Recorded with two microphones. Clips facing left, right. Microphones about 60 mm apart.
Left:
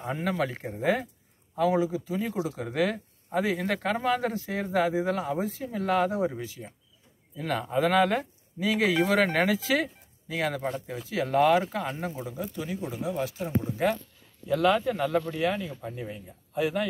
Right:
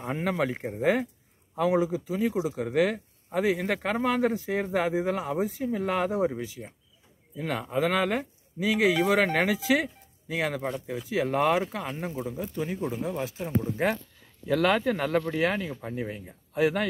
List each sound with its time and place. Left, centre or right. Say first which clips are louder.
0.1 s speech: right 1 dB; centre
2.0 s speech: right 2 dB; centre
11.1 s speech: left 2 dB; right
11.6 s speech: left 1 dB; centre
12.2 s speech: right 2 dB; centre
12.5 s speech: right 5 dB; right
14.5 s speech: even; right
15.7 s speech: right 3 dB; right
16.5 s speech: right 2 dB; right